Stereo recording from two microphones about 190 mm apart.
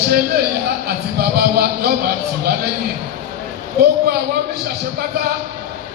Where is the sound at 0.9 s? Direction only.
55° right (ahead or behind).